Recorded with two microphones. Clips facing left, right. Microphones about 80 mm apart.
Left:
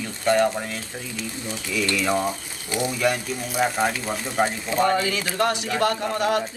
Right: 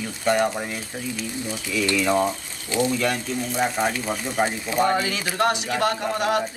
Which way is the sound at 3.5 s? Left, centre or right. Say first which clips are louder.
Left 2 dB; centre.